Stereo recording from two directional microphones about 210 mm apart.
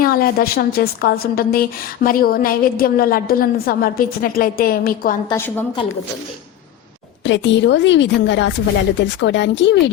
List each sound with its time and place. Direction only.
0.0 s a woman's voice: 45° left (ahead or behind)
5.8 s speech: 25° left (ahead or behind)
7.3 s speech: 60° left (ahead or behind)